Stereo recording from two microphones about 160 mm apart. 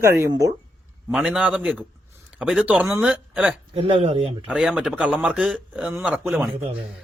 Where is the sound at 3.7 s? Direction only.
35° right (ahead or behind).